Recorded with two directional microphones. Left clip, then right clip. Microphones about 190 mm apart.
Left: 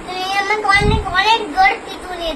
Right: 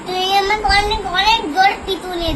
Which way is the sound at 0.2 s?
5° left (ahead or behind).